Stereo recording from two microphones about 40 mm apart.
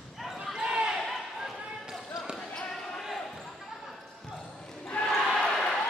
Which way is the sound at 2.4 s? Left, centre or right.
Centre.